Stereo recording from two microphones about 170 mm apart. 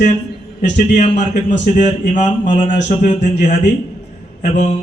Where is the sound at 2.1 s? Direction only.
45° left (ahead or behind).